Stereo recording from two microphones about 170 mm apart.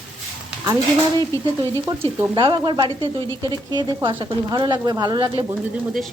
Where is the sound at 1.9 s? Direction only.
25° right (ahead or behind).